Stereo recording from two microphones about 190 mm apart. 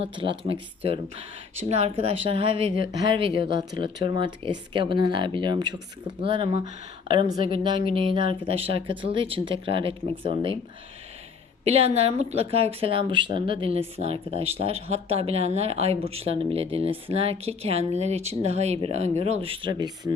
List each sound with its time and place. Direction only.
0.0 s speech: 25° right (ahead or behind)
4.7 s speech: 25° right (ahead or behind)
11.6 s speech: 35° right (ahead or behind)